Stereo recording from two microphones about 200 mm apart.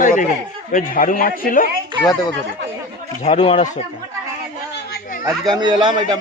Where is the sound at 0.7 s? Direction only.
45° left (ahead or behind).